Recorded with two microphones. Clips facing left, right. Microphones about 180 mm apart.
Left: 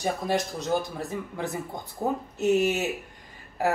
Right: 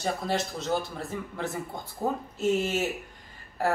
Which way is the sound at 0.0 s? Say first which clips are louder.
Left 2 dB; 15° left (ahead or behind).